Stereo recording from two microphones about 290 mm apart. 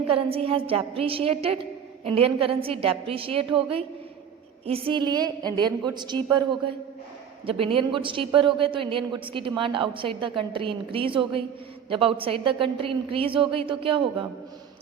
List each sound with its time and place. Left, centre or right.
0.1 s a woman's voice: centre
7.6 s a woman's voice: centre